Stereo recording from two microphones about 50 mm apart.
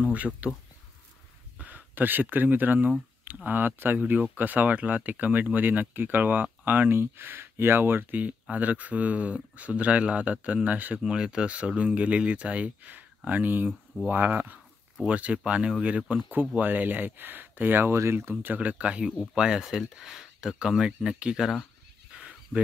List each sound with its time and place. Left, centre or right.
0.1 s speech: right
1.6 s speech: right
11.1 s speech: centre
16.3 s speech: right
18.4 s speech: right; by 21.5 s centre
22.1 s a sound: right